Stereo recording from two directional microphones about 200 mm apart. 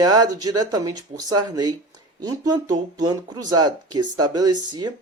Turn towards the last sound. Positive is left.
turn(degrees=-20)  # may be behind; listen again after turning